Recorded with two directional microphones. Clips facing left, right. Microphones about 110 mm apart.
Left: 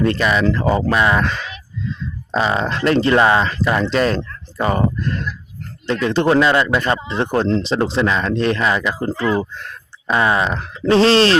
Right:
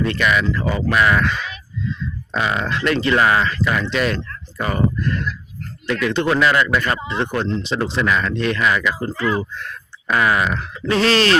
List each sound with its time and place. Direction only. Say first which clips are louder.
0.0 s speech: left 3 dB; 35° left (ahead or behind)
2.3 s speech: left 3 dB; 30° left (ahead or behind)